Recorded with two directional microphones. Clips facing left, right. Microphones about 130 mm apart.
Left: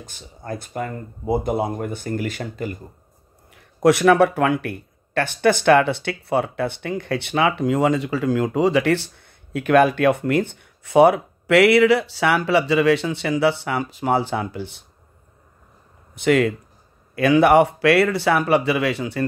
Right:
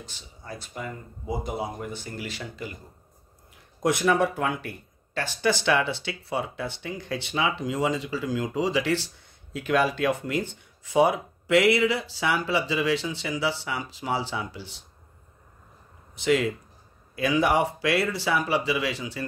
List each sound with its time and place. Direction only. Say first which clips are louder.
0.0 s speech: left 7 dB; 50° left (ahead or behind)
3.8 s speech: left 8 dB; 70° left (ahead or behind); by 14.8 s 55° left (ahead or behind)
16.2 s speech: left 6 dB; 60° left (ahead or behind)